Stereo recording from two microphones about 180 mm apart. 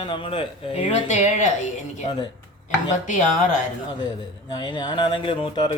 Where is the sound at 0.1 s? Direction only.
25° left (ahead or behind).